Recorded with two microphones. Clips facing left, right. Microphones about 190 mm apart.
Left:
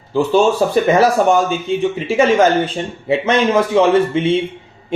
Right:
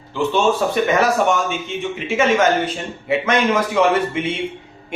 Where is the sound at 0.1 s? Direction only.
35° left (ahead or behind).